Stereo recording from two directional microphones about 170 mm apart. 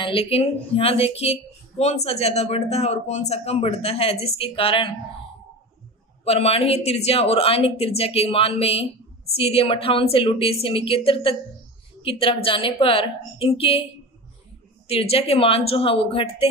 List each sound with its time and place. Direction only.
0.0 s speech: 35° left (ahead or behind)
6.2 s speech: 35° left (ahead or behind)
14.9 s speech: 35° left (ahead or behind)